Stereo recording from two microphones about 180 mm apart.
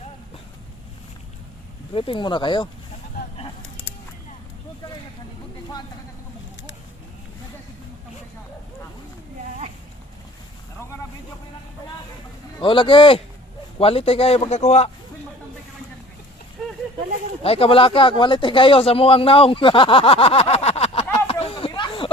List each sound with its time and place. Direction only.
1.9 s speech: 30° left (ahead or behind)
12.5 s speech: 25° left (ahead or behind)
17.4 s speech: 30° left (ahead or behind)
21.4 s a sound: 30° left (ahead or behind)